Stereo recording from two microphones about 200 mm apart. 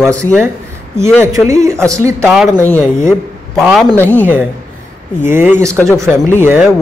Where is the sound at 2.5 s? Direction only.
10° left (ahead or behind).